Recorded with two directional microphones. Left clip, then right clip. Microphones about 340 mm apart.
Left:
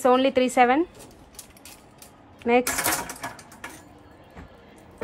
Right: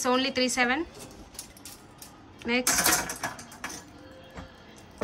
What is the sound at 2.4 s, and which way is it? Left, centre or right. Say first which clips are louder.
Speech: left 8 dB; centre.